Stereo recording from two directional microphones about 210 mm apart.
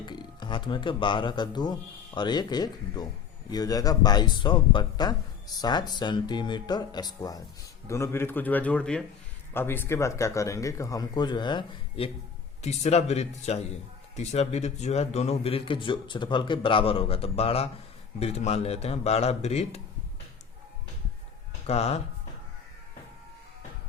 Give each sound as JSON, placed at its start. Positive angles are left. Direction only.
{"t": 0.0, "sound": "speech", "side_deg": 20}
{"t": 21.7, "sound": "speech", "side_deg": 30}